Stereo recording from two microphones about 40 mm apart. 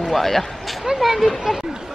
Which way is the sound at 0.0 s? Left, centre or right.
Centre.